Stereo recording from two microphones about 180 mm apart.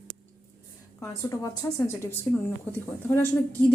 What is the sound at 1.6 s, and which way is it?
Speech, 15° left (ahead or behind).